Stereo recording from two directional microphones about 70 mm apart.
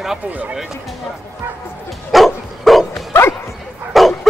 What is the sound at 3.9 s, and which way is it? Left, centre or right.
Bow-wow, centre.